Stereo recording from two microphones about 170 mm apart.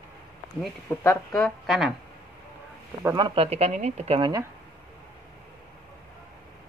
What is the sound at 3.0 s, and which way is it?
Speech, 25° right (ahead or behind).